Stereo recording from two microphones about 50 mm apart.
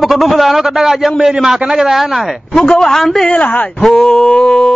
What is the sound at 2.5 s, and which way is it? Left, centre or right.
Speech, centre.